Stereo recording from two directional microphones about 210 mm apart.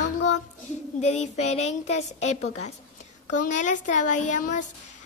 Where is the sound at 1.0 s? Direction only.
35° left (ahead or behind).